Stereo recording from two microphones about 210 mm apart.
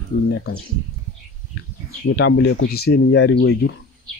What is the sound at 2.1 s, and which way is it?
Speech, 55° left (ahead or behind).